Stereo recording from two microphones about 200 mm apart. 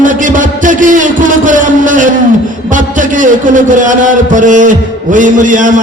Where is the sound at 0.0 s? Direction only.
40° right (ahead or behind).